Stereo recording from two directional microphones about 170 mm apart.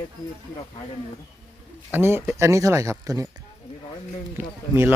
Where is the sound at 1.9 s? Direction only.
15° right (ahead or behind).